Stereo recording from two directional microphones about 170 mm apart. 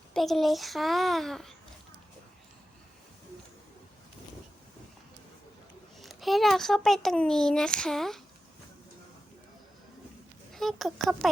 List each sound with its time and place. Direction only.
0.1 s speech: centre (ahead or behind)
6.0 s speech: centre (ahead or behind)
10.5 s speech: centre (ahead or behind)